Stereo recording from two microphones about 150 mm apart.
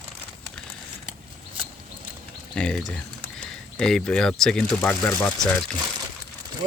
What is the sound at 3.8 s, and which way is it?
Speech, 5° left (ahead or behind).